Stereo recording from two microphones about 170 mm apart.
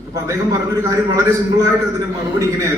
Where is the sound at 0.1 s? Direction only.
20° right (ahead or behind).